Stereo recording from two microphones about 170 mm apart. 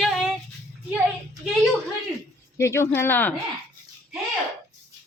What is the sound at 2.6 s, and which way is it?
Speech, 15° left (ahead or behind).